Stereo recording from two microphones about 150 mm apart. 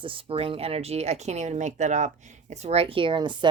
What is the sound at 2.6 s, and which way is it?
Speech, 40° right (ahead or behind).